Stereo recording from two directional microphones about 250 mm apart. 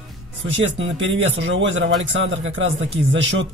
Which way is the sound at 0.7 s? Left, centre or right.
Right.